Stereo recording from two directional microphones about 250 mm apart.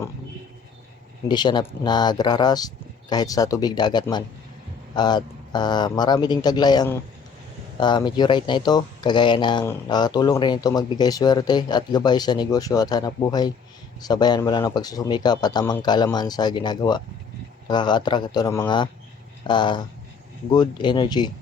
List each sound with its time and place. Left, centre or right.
1.3 s speech: centre